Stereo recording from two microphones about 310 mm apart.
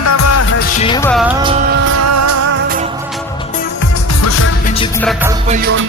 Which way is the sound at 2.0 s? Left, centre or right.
Right.